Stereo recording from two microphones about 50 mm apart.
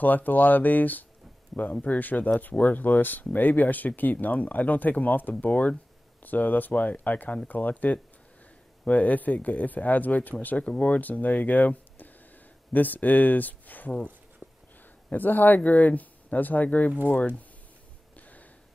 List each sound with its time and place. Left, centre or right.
0.0 s speech: left
15.0 s speech: left
18.1 s a sound: left